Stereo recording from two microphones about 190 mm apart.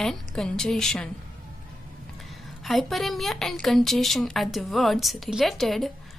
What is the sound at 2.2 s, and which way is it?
A woman's voice, centre (ahead or behind).